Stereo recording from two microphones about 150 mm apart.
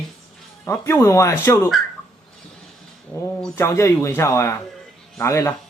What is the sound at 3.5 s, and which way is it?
Speech, 20° left (ahead or behind).